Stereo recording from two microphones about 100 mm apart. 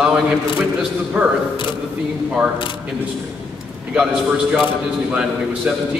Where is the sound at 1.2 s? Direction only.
15° right (ahead or behind).